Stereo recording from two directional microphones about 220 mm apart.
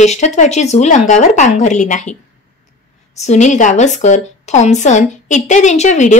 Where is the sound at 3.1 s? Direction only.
30° left (ahead or behind).